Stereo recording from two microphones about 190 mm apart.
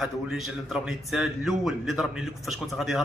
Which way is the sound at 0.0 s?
Centre (ahead or behind).